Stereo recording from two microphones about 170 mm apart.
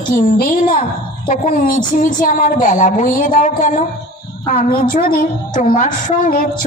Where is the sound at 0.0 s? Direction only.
55° left (ahead or behind).